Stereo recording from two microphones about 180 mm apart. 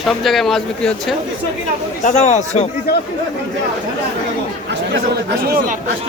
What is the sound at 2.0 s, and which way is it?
Speech, 40° left (ahead or behind).